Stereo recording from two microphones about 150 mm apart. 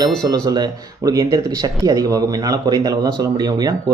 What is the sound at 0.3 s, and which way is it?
Speech, 25° right (ahead or behind).